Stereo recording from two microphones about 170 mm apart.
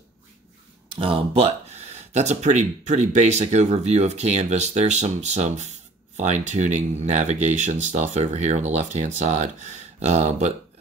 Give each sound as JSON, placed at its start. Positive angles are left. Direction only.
{"t": 0.9, "sound": "speech", "side_deg": -35}